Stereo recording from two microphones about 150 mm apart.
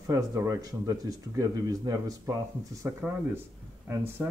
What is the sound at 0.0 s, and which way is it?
Speech, 20° right (ahead or behind).